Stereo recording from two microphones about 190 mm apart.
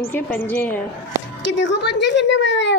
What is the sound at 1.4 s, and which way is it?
A woman's voice, 70° left (ahead or behind).